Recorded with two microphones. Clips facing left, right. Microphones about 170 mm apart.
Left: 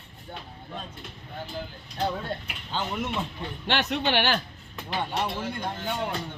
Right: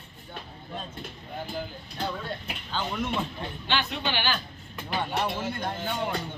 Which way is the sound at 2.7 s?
20° left (ahead or behind).